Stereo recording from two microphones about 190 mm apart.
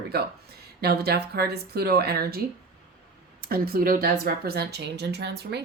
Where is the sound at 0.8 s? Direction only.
55° right (ahead or behind).